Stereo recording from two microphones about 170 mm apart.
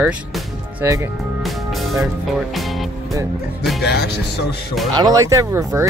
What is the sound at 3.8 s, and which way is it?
Music, 75° left (ahead or behind).